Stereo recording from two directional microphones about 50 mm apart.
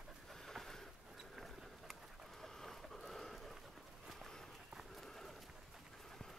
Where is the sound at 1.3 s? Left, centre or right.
Centre.